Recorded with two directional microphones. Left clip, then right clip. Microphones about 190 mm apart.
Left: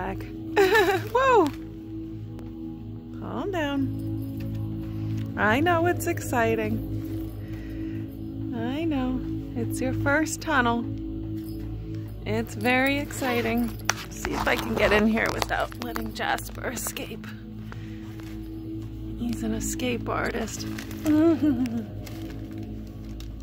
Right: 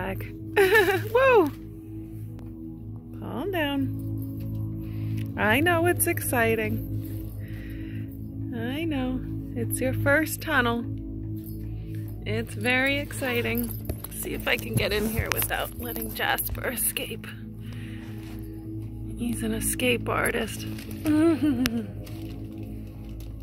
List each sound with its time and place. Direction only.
0.0 s speech: centre (ahead or behind)
3.3 s speech: centre (ahead or behind)
5.1 s speech: centre (ahead or behind)
8.5 s speech: 5° left (ahead or behind)
12.3 s speech: 10° left (ahead or behind)
15.5 s speech: 5° right (ahead or behind)
19.8 s speech: 5° right (ahead or behind)